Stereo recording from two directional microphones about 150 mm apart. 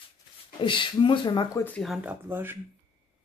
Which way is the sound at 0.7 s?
35° left (ahead or behind).